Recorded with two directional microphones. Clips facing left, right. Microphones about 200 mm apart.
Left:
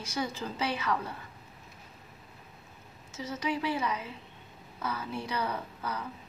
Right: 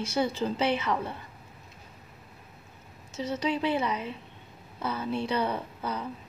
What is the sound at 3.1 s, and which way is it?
A woman's voice, 30° right (ahead or behind).